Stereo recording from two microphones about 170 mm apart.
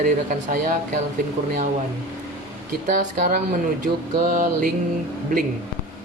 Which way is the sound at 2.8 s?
50° right (ahead or behind).